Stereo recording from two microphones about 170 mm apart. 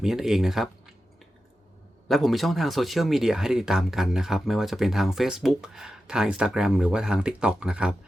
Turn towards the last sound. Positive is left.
turn(degrees=-5)  # may be behind; listen again after turning